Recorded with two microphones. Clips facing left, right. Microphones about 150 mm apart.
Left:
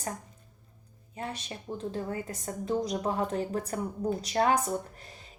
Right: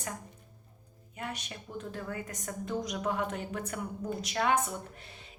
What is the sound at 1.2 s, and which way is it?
A woman's voice, 30° left (ahead or behind).